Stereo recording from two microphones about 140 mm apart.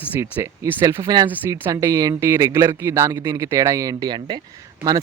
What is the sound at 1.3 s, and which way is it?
A man's voice, 15° right (ahead or behind).